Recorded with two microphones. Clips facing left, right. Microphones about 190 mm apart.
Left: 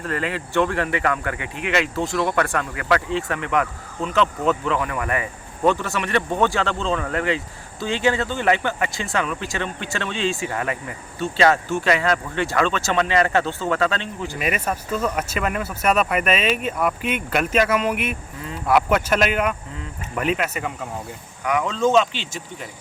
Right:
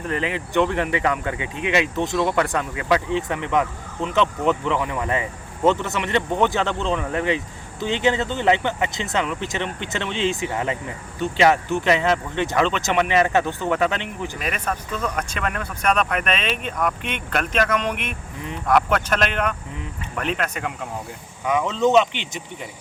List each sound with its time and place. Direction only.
0.0 s speech: 20° right (ahead or behind)
14.3 s speech: 5° left (ahead or behind)
21.4 s speech: 20° right (ahead or behind)